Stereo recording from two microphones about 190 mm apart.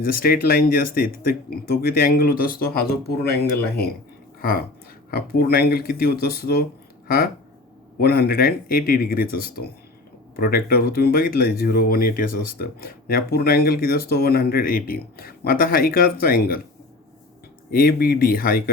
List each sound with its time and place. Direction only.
0.0 s speech: 50° left (ahead or behind)
7.9 s speech: 55° left (ahead or behind)
17.7 s speech: 50° left (ahead or behind)